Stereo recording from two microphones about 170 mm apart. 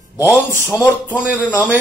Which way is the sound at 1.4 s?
10° right (ahead or behind).